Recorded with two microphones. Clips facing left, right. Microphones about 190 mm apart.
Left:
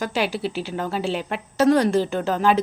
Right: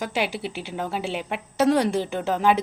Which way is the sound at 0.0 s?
20° right (ahead or behind).